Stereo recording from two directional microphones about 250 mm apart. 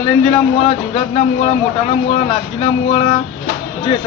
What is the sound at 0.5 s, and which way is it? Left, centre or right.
A man's voice, left.